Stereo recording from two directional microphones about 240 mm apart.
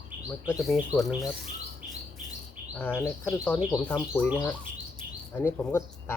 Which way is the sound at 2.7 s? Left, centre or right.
Centre.